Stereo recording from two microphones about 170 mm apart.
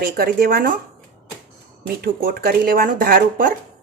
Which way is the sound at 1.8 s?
60° right (ahead or behind).